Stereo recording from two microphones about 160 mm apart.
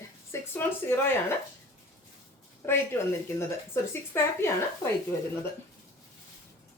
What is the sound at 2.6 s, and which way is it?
A woman's voice, 15° left (ahead or behind).